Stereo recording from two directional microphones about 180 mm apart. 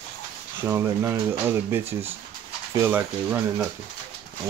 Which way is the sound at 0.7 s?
15° right (ahead or behind).